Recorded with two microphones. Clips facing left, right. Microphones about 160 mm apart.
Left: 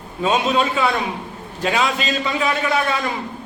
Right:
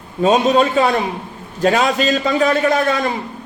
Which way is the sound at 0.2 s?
40° right (ahead or behind).